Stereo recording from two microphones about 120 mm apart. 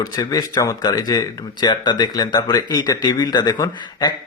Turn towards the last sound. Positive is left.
turn(degrees=35)  # may be behind; listen again after turning